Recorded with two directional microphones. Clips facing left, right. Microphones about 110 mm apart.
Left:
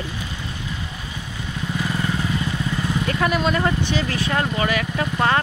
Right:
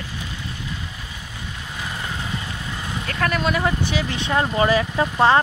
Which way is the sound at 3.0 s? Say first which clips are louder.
Left 1 dB; 10° left (ahead or behind).